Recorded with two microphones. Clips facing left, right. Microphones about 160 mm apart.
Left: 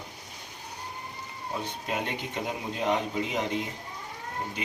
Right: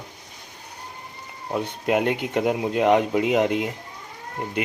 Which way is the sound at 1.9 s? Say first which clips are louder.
Right 12 dB; 65° right (ahead or behind).